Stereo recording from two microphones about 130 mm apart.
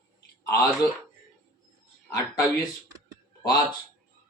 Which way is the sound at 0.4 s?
25° left (ahead or behind).